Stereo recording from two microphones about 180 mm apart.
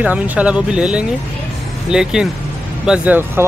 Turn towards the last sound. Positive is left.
turn(degrees=-10)  # may be behind; listen again after turning